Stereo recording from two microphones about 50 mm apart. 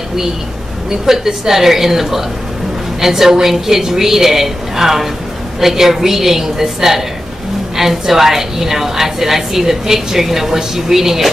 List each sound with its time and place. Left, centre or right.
0.8 s a woman's voice: centre